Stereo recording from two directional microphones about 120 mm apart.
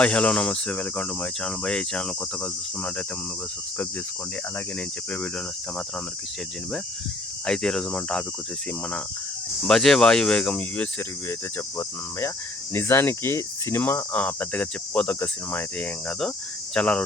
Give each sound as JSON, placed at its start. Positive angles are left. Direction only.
{"t": 0.0, "sound": "speech", "side_deg": 10}
{"t": 7.4, "sound": "cricket", "side_deg": 5}
{"t": 9.6, "sound": "speech", "side_deg": 5}
{"t": 11.3, "sound": "cricket", "side_deg": 20}
{"t": 12.7, "sound": "speech", "side_deg": 20}